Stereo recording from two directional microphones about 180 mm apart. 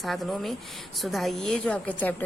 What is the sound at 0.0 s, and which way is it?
A woman's voice, centre (ahead or behind).